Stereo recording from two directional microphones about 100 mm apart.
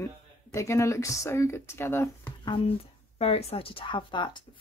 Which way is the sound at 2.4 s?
60° left (ahead or behind).